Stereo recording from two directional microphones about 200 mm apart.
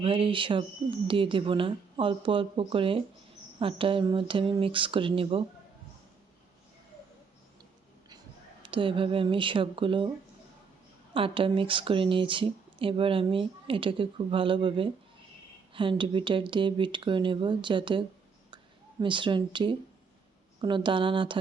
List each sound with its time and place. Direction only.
0.0 s speech: 25° right (ahead or behind)
8.6 s speech: 25° right (ahead or behind)
11.1 s speech: 25° right (ahead or behind)
18.5 s a sound: 25° right (ahead or behind)
20.6 s speech: 25° right (ahead or behind)